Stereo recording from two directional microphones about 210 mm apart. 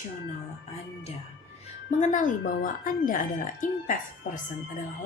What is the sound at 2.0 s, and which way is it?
Speech, 35° left (ahead or behind).